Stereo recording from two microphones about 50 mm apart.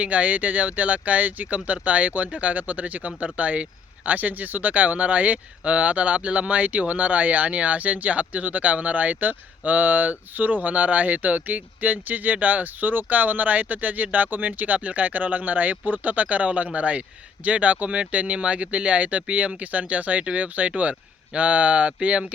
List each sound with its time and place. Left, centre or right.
0.0 s speech: right